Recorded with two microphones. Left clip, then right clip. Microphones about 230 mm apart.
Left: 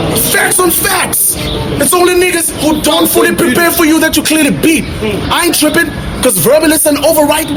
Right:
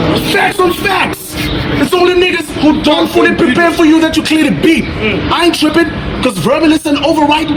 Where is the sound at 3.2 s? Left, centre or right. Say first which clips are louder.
Even; left.